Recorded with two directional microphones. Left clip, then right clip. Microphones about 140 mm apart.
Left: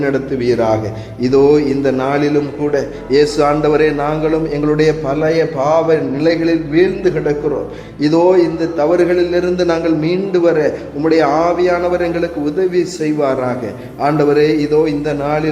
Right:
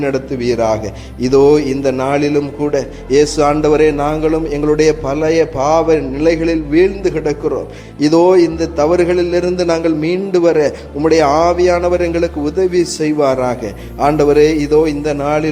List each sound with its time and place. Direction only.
0.0 s a man's voice: 25° right (ahead or behind)
1.2 s a man's voice: 35° right (ahead or behind)
8.0 s a man's voice: 40° right (ahead or behind)